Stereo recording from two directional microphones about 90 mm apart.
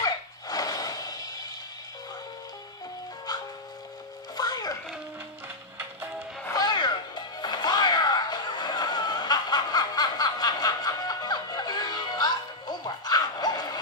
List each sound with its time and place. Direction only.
0.0 s dog: 45° left (ahead or behind)
3.3 s ice cream truck: 45° left (ahead or behind)
4.4 s music: 45° left (ahead or behind)
6.5 s music: 50° left (ahead or behind)